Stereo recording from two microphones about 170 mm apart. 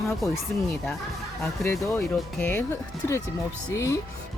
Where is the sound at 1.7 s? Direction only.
15° left (ahead or behind).